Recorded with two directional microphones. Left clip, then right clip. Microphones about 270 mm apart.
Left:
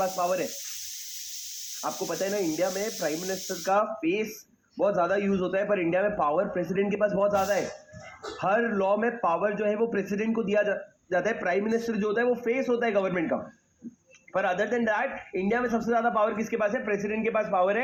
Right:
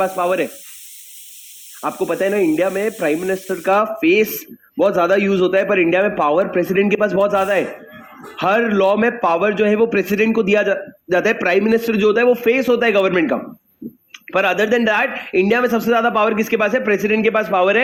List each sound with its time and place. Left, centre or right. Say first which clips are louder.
0.0 s speech: right 9 dB; right
1.8 s a man's voice: right 11 dB; right